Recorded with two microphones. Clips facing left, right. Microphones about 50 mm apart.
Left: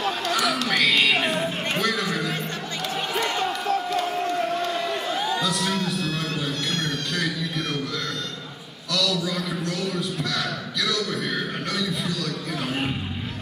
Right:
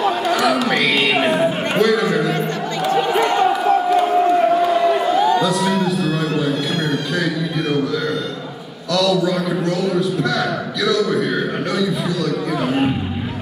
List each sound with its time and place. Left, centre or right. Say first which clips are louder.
0.0 s a sound: right 7 dB; centre
5.4 s music: right 8 dB; centre
8.9 s speech: right 9 dB; centre
12.6 s speech: right 9 dB; centre